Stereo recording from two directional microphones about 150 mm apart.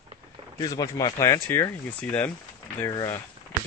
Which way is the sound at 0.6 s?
25° left (ahead or behind).